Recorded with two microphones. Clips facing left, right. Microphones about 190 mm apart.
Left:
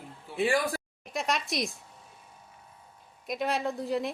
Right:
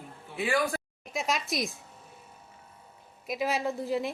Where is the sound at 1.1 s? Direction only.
Centre (ahead or behind).